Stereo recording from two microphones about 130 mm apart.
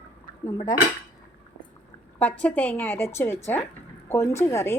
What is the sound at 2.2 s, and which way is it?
A woman's voice, 10° left (ahead or behind).